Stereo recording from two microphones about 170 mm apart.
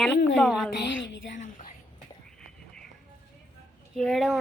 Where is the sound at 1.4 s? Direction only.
50° left (ahead or behind).